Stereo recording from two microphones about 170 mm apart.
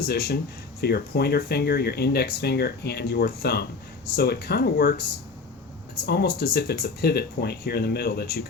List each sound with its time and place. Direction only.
0.0 s speech: 70° left (ahead or behind)
6.1 s speech: 70° left (ahead or behind)